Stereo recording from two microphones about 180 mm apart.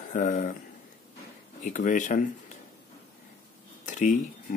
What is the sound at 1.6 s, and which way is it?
Speech, 45° left (ahead or behind).